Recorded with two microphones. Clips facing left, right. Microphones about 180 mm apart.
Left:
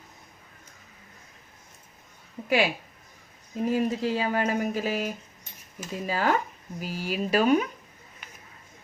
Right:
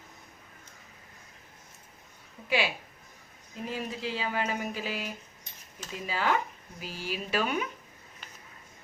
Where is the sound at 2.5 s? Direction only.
45° left (ahead or behind).